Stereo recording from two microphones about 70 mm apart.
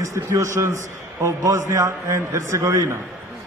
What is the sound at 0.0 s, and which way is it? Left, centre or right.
A man's voice, right.